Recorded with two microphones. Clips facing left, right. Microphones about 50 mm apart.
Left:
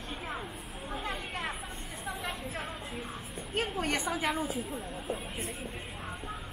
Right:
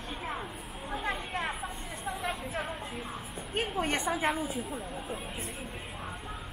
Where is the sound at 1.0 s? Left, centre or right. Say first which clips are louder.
Right 4 dB; right.